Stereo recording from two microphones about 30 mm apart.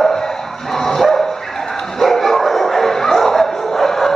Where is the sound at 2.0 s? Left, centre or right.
Centre.